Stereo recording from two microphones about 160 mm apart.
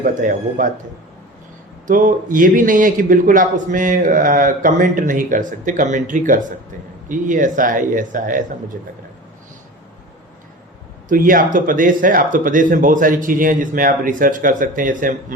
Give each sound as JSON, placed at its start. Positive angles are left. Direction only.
{"t": 0.0, "sound": "a man's voice", "side_deg": -55}
{"t": 1.9, "sound": "a man's voice", "side_deg": -55}
{"t": 11.1, "sound": "a man's voice", "side_deg": -60}